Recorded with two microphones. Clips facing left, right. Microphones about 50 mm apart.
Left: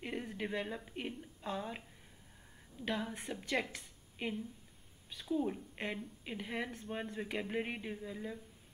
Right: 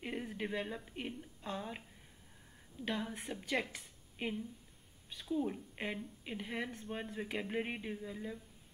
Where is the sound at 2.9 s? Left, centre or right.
Centre.